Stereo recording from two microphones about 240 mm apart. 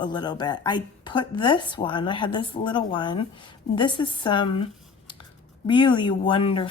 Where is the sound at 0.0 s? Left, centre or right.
Centre.